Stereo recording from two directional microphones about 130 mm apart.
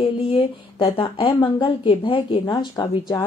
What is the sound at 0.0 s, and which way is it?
Speech, 45° left (ahead or behind).